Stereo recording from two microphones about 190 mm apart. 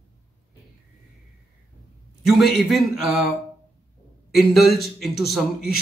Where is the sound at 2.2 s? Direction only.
Centre (ahead or behind).